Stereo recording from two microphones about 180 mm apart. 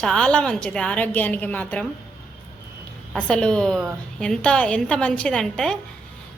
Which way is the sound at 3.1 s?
5° left (ahead or behind).